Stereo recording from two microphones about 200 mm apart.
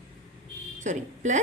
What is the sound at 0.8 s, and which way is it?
Speech, 40° right (ahead or behind).